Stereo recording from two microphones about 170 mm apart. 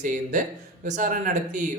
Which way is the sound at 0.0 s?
45° right (ahead or behind).